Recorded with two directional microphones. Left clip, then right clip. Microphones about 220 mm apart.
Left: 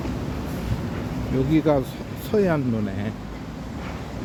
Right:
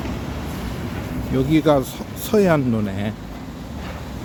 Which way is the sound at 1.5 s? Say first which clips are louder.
Right 4 dB; 20° right (ahead or behind).